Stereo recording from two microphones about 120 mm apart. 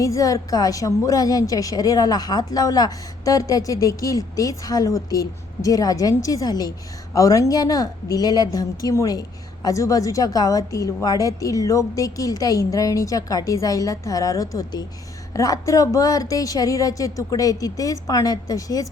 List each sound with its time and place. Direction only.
0.0 s a woman's voice: 25° left (ahead or behind)